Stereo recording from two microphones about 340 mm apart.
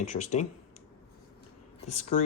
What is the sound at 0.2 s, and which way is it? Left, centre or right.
Speech, left.